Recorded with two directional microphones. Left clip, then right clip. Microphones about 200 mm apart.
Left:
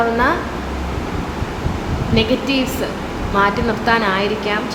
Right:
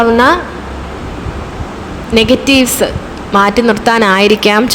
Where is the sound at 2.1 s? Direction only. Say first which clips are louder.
Right 9 dB; 50° right (ahead or behind).